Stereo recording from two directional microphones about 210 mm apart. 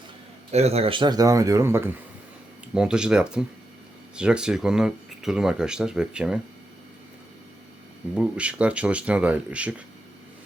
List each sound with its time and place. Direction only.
0.5 s speech: 30° right (ahead or behind); by 6.4 s 5° right (ahead or behind)
8.1 s speech: 5° right (ahead or behind)